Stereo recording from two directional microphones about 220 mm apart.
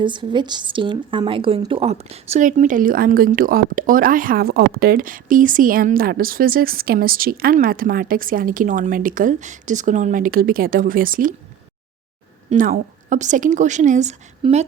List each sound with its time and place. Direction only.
0.0 s speech: 20° right (ahead or behind); by 11.3 s 40° right (ahead or behind)
12.5 s speech: 35° right (ahead or behind)